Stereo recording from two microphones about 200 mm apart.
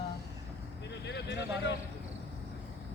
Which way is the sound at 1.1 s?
60° left (ahead or behind).